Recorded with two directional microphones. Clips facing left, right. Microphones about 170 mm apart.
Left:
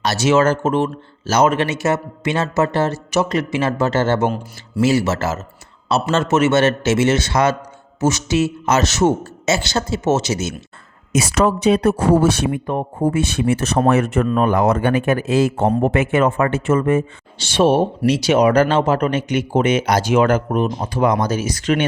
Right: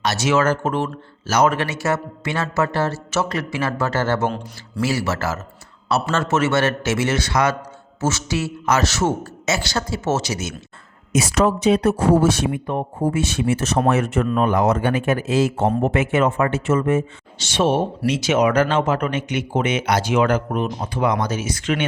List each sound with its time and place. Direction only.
0.0 s a man's voice: 30° left (ahead or behind)
11.1 s a man's voice: 75° left (ahead or behind); by 17.0 s 55° left (ahead or behind)
17.3 s speech: 30° left (ahead or behind)